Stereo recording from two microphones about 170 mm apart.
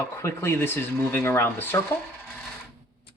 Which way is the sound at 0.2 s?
15° left (ahead or behind).